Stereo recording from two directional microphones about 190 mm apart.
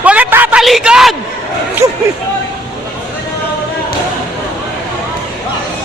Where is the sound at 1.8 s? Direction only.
15° right (ahead or behind).